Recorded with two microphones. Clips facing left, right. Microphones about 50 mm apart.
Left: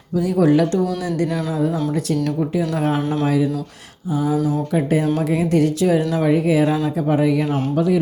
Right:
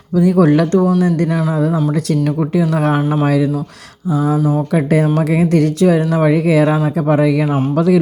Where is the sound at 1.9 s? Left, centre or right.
Right.